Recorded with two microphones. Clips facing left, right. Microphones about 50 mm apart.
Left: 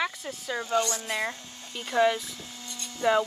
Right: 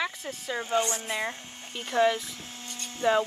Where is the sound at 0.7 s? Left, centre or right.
Right.